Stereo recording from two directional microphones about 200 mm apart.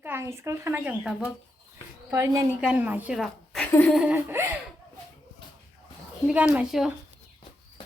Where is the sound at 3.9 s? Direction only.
5° right (ahead or behind).